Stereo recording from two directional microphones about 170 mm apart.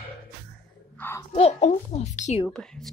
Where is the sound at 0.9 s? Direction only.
10° left (ahead or behind).